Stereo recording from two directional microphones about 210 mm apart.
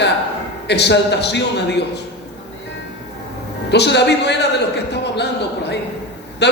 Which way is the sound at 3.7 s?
55° left (ahead or behind).